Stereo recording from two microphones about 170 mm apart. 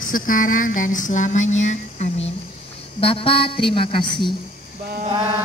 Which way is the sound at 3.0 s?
35° left (ahead or behind).